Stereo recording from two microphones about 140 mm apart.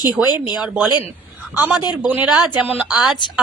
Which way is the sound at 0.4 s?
5° right (ahead or behind).